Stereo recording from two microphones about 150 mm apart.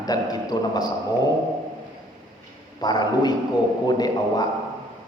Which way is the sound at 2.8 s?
30° left (ahead or behind).